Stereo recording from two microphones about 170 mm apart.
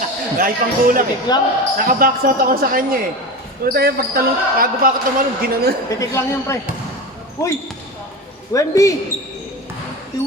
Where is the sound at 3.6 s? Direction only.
65° right (ahead or behind).